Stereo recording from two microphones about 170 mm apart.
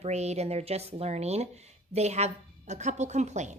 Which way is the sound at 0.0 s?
40° right (ahead or behind).